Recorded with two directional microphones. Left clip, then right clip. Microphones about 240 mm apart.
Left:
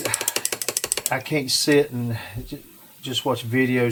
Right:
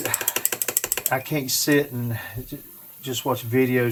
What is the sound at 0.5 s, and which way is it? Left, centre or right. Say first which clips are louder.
Ratchet: left 1 dB; centre.